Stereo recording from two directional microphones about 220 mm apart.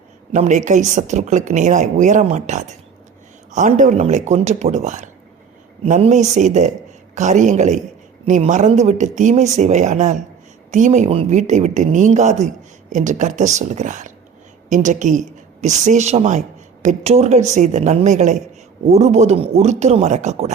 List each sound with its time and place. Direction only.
0.3 s a woman's voice: 35° right (ahead or behind)